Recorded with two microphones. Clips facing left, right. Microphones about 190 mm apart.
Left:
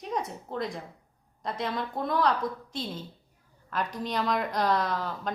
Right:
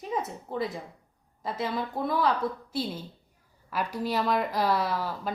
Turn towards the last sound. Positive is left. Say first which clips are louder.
# right 1 dB
turn(degrees=-5)  # may be behind; listen again after turning